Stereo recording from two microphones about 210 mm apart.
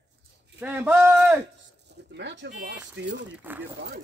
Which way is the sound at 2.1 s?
60° right (ahead or behind).